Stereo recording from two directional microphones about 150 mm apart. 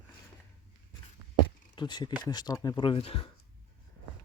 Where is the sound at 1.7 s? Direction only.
30° left (ahead or behind).